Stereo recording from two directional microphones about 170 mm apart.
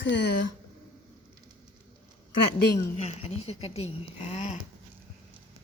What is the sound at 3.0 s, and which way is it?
Speech, 40° left (ahead or behind).